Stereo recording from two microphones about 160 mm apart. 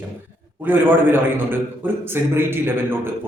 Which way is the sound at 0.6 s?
10° right (ahead or behind).